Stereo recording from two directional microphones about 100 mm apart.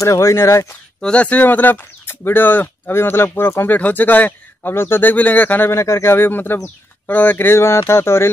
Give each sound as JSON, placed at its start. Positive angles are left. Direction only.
{"t": 0.0, "sound": "speech", "side_deg": 30}
{"t": 1.0, "sound": "speech", "side_deg": 15}